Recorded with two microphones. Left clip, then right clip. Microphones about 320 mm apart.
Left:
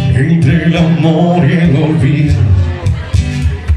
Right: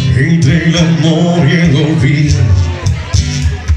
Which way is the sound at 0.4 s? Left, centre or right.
Left.